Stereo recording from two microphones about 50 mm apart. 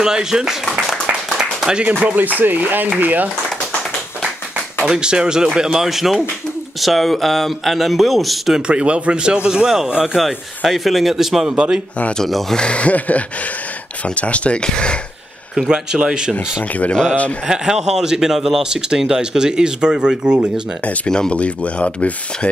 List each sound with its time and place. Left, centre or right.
0.0 s a man's voice: centre
1.4 s a sound: centre
1.9 s a man's voice: right
2.1 s speech: right
4.8 s a man's voice: centre
8.5 s a man's voice: right
10.1 s speech: centre
11.5 s a man's voice: centre
12.2 s speech: centre
12.5 s speech: left
15.5 s a man's voice: centre
21.1 s speech: centre
21.4 s speech: left